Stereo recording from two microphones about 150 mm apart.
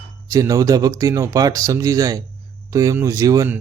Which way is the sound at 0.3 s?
25° right (ahead or behind).